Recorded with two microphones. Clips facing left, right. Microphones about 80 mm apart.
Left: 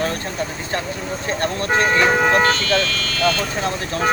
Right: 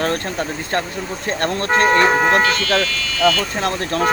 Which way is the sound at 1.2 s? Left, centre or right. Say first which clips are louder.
Right 2 dB; right.